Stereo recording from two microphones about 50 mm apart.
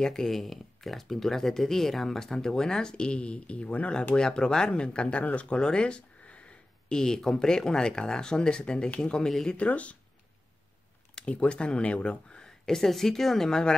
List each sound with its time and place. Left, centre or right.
0.0 s speech: centre; by 5.6 s left
5.6 s a sound: centre
7.0 s speech: centre
9.6 s speech: left
11.1 s speech: left